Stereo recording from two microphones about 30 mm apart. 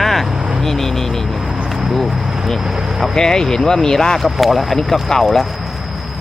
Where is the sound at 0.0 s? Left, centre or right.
Centre.